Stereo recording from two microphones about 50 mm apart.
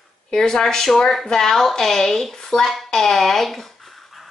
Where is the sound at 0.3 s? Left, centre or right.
Centre.